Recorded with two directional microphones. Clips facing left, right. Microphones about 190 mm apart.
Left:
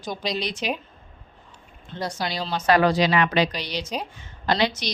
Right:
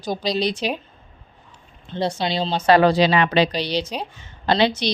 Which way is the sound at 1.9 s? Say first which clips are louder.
Right 6 dB; 25° right (ahead or behind).